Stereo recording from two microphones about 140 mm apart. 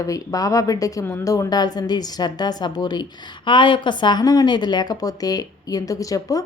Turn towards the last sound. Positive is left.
turn(degrees=25)  # may be behind; listen again after turning